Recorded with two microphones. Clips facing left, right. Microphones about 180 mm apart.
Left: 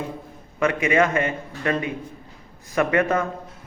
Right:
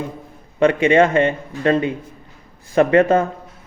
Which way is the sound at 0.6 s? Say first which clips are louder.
Right 6 dB; 30° right (ahead or behind).